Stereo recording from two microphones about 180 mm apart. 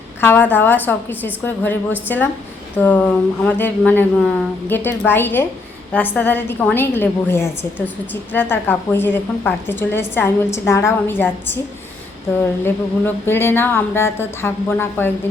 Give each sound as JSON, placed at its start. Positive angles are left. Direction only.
{"t": 0.2, "sound": "a woman's voice", "side_deg": 10}
{"t": 12.6, "sound": "a woman's voice", "side_deg": 10}